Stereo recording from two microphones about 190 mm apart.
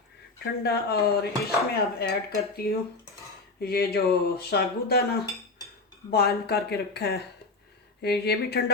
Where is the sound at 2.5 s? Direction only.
55° left (ahead or behind).